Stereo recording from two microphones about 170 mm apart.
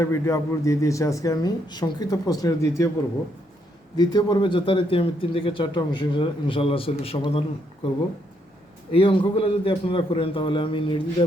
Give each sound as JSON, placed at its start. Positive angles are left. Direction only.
{"t": 0.0, "sound": "speech", "side_deg": 15}
{"t": 3.9, "sound": "speech", "side_deg": 25}
{"t": 8.9, "sound": "speech", "side_deg": 30}